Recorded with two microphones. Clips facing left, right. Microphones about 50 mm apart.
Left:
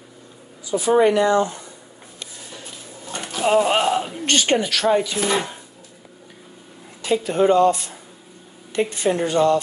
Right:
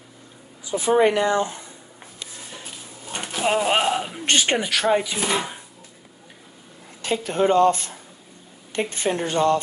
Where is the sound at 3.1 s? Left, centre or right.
Centre.